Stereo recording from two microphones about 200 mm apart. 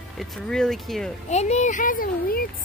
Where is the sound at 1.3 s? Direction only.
35° left (ahead or behind).